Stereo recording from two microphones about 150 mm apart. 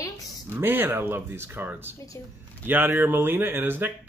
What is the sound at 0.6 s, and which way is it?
Speech, 15° right (ahead or behind).